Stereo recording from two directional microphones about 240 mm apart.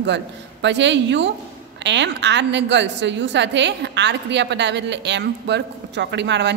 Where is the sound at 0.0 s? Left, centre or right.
Right.